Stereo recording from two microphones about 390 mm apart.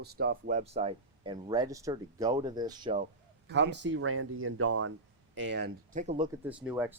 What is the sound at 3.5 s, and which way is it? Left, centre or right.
Speech, right.